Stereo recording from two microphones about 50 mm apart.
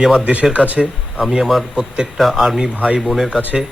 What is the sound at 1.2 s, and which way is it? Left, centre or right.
Speech, centre.